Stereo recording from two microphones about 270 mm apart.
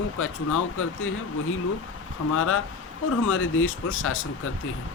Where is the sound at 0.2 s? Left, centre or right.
Left.